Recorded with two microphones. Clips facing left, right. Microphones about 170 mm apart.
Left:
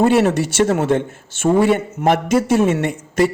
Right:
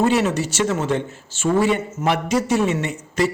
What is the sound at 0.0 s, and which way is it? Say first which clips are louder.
A man's voice: left 4 dB; 55° left (ahead or behind).